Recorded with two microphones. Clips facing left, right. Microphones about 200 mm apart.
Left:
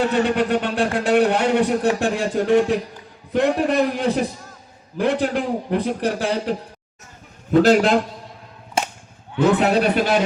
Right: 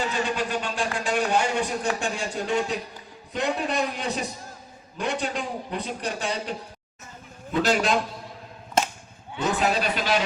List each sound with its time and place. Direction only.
0.0 s a man's voice: 60° left (ahead or behind)
9.4 s a man's voice: 60° left (ahead or behind)